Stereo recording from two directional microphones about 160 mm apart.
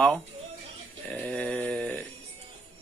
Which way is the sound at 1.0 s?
10° left (ahead or behind).